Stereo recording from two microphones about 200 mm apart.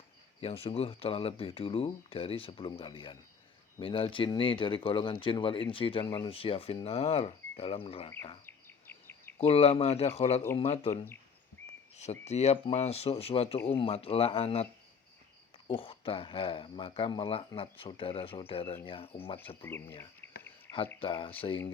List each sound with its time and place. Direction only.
0.3 s speech: 30° left (ahead or behind)
8.4 s insect: 10° left (ahead or behind)
9.5 s speech: 30° left (ahead or behind)
10.9 s speech: 10° left (ahead or behind)
12.2 s speech: 35° left (ahead or behind)
19.6 s cricket: 10° left (ahead or behind)
21.0 s speech: 25° left (ahead or behind)